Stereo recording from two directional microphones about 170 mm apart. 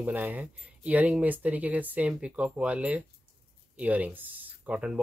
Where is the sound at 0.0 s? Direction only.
10° right (ahead or behind).